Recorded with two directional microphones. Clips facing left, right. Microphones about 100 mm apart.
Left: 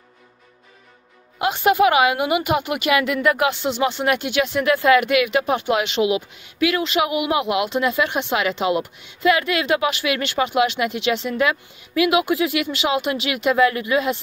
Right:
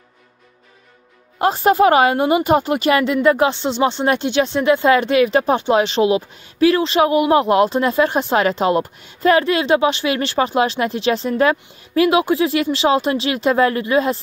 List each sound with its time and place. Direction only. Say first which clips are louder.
1.4 s a woman's voice: right 3 dB; 35° right (ahead or behind)